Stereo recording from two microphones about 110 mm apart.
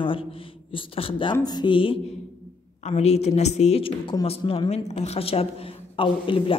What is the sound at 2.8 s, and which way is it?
A woman's voice, 75° left (ahead or behind).